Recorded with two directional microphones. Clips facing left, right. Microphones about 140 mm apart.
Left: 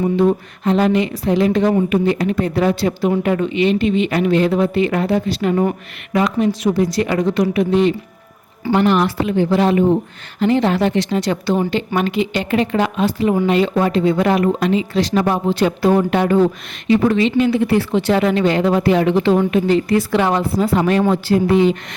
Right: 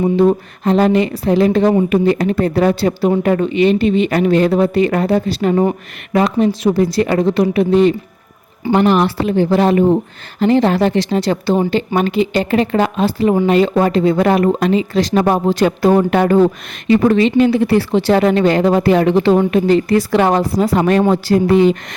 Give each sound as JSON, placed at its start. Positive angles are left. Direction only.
{"t": 0.2, "sound": "speech", "side_deg": -40}